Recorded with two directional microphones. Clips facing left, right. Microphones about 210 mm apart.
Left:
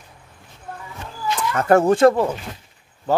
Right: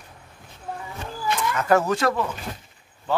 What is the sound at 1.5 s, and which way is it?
Speech, 50° left (ahead or behind).